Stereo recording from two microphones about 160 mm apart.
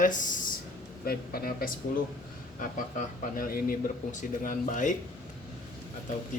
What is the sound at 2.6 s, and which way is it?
Speech, 55° left (ahead or behind).